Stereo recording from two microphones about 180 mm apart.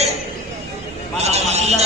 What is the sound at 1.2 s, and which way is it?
Speech, 40° right (ahead or behind).